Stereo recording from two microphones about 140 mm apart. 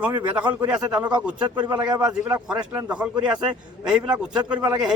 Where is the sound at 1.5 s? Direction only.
30° right (ahead or behind).